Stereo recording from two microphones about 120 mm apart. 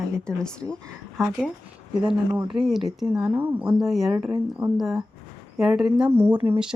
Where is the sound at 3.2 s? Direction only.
15° right (ahead or behind).